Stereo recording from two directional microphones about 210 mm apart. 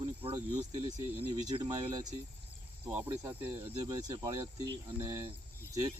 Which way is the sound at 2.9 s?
10° right (ahead or behind).